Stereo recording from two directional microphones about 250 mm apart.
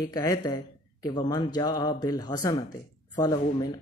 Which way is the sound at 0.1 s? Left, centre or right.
Centre.